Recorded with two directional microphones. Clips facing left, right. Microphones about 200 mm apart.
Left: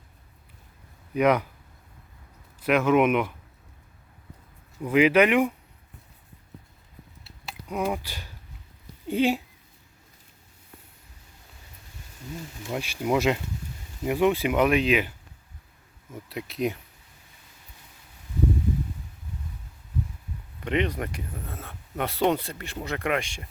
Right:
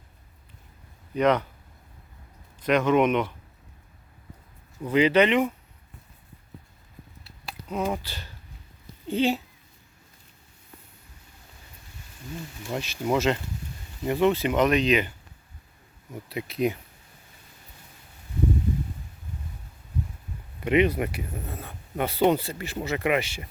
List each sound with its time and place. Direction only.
1.1 s speech: 10° left (ahead or behind)
2.6 s speech: 5° left (ahead or behind)
4.8 s speech: 10° left (ahead or behind)
7.7 s speech: 10° left (ahead or behind)
12.7 s speech: 10° left (ahead or behind)
16.3 s speech: centre (ahead or behind)
20.7 s speech: 10° right (ahead or behind)